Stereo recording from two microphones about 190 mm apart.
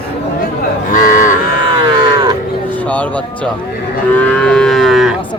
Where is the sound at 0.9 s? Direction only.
45° left (ahead or behind).